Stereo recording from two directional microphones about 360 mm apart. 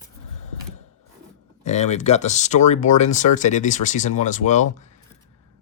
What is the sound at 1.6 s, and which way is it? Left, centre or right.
Speech, centre.